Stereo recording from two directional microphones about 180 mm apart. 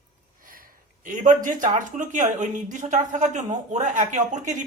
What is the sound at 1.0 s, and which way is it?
A woman's voice, 45° right (ahead or behind).